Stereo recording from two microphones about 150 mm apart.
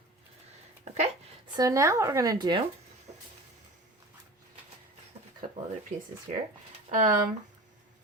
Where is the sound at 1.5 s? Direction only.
20° right (ahead or behind).